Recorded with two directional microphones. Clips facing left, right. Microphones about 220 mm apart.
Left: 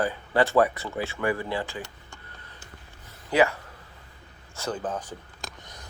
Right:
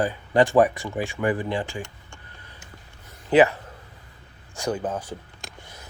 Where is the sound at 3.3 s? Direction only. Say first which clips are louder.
Right 5 dB; 20° right (ahead or behind).